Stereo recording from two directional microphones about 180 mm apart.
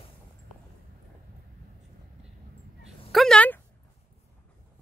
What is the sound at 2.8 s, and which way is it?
Dog, centre (ahead or behind).